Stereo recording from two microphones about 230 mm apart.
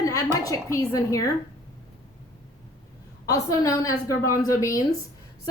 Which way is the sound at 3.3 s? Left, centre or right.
Centre.